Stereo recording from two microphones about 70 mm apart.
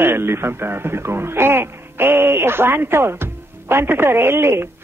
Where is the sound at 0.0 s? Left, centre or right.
Right.